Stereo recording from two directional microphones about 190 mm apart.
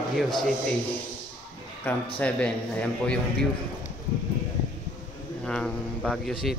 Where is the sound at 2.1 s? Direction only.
5° left (ahead or behind).